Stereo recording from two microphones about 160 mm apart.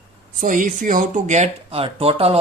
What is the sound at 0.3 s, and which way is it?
Speech, 55° right (ahead or behind).